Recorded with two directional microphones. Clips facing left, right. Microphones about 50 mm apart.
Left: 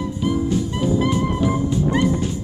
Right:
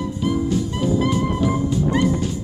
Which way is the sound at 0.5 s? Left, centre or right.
Centre.